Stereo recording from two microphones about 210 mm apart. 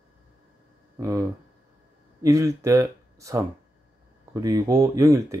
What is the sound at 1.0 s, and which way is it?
Speech, 15° right (ahead or behind).